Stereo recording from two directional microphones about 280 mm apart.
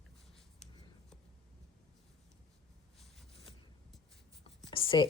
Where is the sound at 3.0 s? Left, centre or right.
Centre.